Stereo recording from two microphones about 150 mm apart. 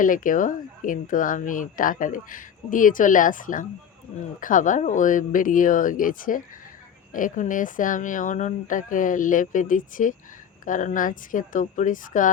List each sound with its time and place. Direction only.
0.0 s speech: 65° left (ahead or behind)